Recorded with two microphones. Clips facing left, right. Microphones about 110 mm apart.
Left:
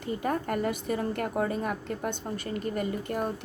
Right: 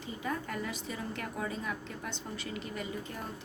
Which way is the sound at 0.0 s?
60° left (ahead or behind).